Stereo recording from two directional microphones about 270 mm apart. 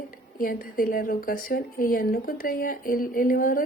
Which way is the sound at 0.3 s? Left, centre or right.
Left.